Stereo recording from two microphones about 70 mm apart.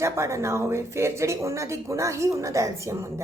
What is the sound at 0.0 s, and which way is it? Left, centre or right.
A woman's voice, right.